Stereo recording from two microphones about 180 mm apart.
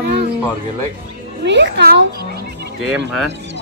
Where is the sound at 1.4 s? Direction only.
80° right; by 2.4 s 65° right (ahead or behind).